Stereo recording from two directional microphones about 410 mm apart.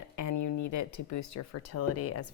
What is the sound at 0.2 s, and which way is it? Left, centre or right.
Speech, left.